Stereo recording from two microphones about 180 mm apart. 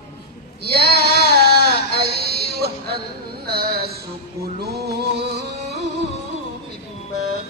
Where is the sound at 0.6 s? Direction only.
60° right (ahead or behind).